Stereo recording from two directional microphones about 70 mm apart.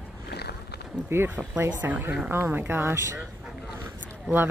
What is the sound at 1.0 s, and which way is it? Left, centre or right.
Speech, right.